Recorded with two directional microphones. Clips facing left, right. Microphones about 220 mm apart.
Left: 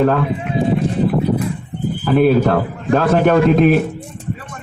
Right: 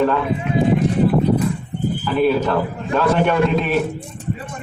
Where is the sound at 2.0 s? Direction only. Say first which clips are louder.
Left 5 dB; 50° left (ahead or behind).